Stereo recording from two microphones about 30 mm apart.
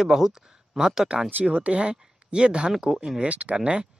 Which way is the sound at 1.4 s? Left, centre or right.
Right.